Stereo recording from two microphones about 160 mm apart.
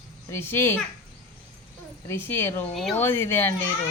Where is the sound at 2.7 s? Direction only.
Centre (ahead or behind).